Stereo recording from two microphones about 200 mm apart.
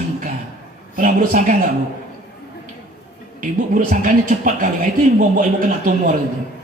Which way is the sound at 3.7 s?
40° right (ahead or behind).